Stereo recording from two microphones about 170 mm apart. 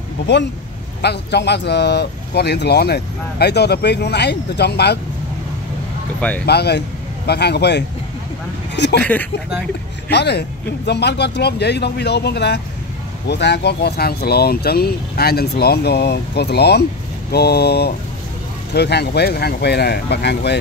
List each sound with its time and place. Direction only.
1.0 s speech: 80° left
6.4 s speech: 75° left (ahead or behind)
8.7 s speech: 90° left
9.0 s speech: 10° left (ahead or behind)
10.0 s speech: 75° left (ahead or behind)